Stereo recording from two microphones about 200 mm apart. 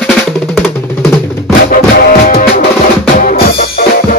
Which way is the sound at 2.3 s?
40° left (ahead or behind).